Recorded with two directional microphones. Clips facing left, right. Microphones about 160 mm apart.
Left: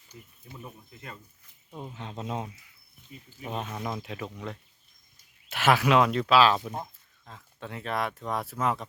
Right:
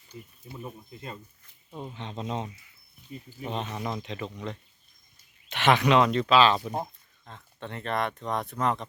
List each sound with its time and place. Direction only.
0.6 s speech: 25° right (ahead or behind)
1.7 s speech: 5° left (ahead or behind)
3.1 s speech: 35° right (ahead or behind)
3.4 s speech: 5° left (ahead or behind)